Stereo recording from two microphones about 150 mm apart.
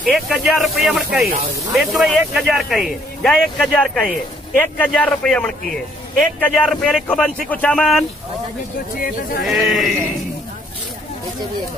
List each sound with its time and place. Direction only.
0.0 s a man's voice: 5° right (ahead or behind)
9.4 s speech: centre (ahead or behind)